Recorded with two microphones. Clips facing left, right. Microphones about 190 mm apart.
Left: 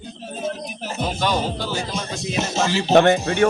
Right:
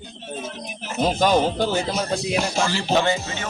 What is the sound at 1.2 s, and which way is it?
Speech, 45° right (ahead or behind).